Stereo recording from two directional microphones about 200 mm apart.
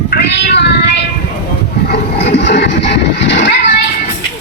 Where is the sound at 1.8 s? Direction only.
55° left (ahead or behind).